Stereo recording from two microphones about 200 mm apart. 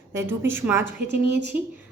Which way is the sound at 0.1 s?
10° right (ahead or behind).